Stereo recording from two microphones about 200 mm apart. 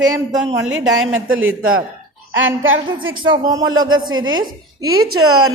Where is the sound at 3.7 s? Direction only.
90° right.